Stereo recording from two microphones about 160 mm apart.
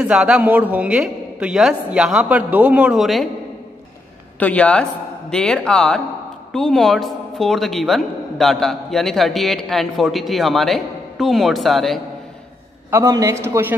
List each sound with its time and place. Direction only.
0.0 s a man's voice: 5° right (ahead or behind)
4.4 s a woman's voice: 10° left (ahead or behind)
12.9 s a man's voice: 20° right (ahead or behind)